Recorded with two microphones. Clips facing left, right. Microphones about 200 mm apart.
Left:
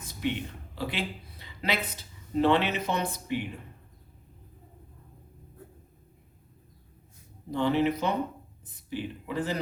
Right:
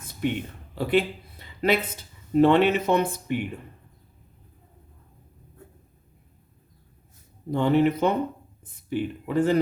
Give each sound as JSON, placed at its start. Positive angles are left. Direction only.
{"t": 0.2, "sound": "a man's voice", "side_deg": -50}
{"t": 7.5, "sound": "speech", "side_deg": -55}